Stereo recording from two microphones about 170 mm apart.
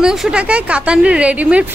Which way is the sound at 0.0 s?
5° right (ahead or behind).